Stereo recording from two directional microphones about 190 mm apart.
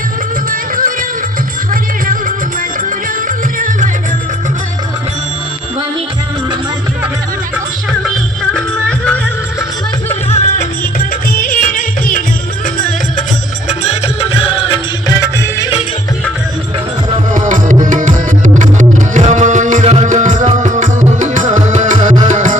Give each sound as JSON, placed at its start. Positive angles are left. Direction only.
{"t": 0.5, "sound": "music", "side_deg": -45}
{"t": 8.5, "sound": "music", "side_deg": 5}
{"t": 10.2, "sound": "music", "side_deg": 35}
{"t": 11.3, "sound": "music", "side_deg": 50}
{"t": 13.7, "sound": "music", "side_deg": 35}
{"t": 17.3, "sound": "tabla", "side_deg": -45}